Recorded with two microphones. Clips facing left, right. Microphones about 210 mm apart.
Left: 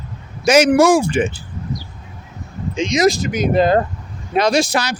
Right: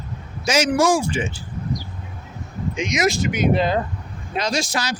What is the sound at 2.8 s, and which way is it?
Speech, 30° left (ahead or behind).